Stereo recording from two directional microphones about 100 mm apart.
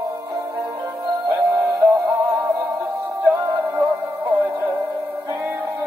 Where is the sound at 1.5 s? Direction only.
35° right (ahead or behind).